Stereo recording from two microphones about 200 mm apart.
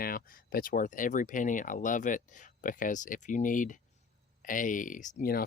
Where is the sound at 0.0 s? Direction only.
45° left (ahead or behind).